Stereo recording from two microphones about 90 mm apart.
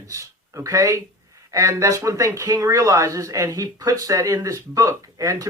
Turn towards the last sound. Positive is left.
turn(degrees=-40)  # may be behind; listen again after turning